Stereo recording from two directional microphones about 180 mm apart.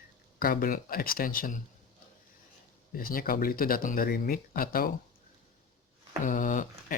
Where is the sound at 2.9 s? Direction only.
55° left (ahead or behind).